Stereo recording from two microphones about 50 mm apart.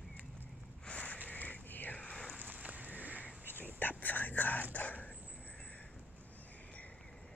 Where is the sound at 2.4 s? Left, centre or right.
Right.